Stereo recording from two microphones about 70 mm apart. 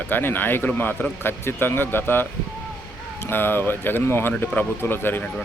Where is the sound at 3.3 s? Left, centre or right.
Left.